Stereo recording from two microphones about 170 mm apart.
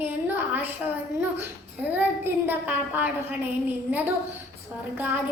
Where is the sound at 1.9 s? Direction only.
10° right (ahead or behind).